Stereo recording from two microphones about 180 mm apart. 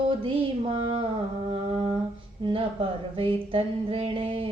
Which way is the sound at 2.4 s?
30° right (ahead or behind).